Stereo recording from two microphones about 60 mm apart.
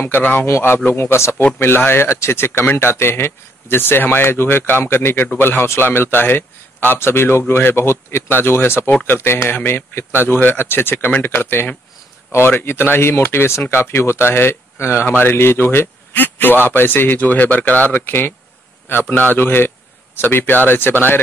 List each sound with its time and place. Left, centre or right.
0.0 s a man's voice: left
0.5 s speech: left
1.4 s a man's voice: left